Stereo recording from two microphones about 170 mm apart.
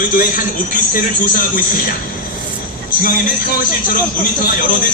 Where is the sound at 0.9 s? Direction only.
55° left (ahead or behind).